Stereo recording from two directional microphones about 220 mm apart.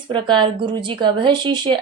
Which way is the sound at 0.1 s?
20° right (ahead or behind).